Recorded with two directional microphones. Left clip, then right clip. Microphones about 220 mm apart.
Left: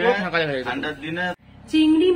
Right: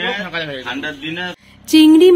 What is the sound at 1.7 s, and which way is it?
Speech, 50° right (ahead or behind).